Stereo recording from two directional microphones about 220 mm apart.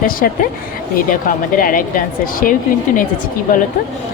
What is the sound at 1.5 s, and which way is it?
A woman's voice, 40° left (ahead or behind).